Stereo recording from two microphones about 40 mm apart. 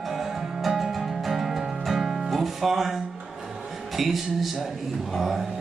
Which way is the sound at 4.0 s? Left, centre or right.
Centre.